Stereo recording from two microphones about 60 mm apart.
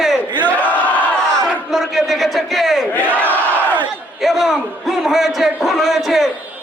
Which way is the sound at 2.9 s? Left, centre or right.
Left.